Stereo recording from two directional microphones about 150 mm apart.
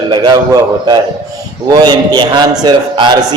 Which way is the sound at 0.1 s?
25° right (ahead or behind).